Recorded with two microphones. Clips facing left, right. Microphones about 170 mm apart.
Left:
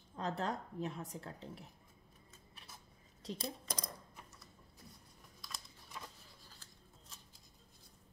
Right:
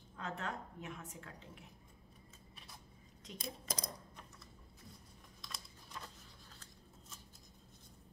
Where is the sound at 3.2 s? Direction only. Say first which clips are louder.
Left 8 dB; 35° left (ahead or behind).